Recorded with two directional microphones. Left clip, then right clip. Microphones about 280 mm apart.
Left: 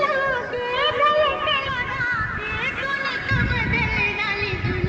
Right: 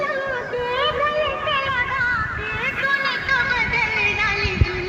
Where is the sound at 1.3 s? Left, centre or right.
Left.